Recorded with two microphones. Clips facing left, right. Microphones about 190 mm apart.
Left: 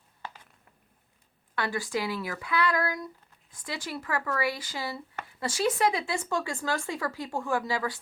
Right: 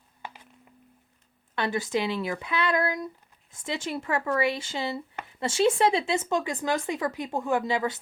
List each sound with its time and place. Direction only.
1.5 s speech: 20° right (ahead or behind)